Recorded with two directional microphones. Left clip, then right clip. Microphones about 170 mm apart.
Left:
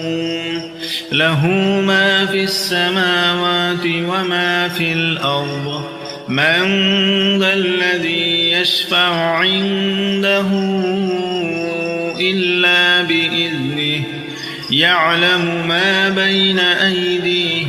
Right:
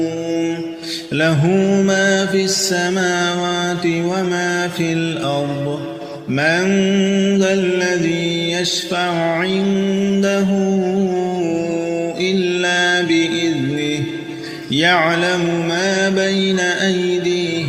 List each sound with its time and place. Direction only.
1.1 s mantra: 40° right (ahead or behind)
12.2 s mantra: 40° right (ahead or behind)